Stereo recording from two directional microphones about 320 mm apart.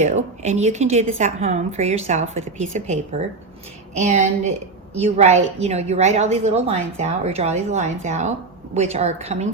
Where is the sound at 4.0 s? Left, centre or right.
Right.